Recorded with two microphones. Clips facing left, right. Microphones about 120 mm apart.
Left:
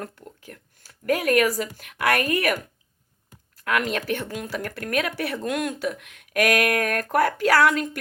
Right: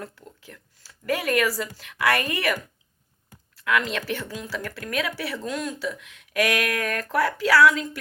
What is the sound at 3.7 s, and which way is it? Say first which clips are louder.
Speech: left 1 dB; 50° left (ahead or behind).